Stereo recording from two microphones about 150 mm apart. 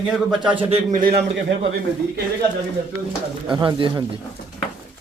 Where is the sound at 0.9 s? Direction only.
80° right.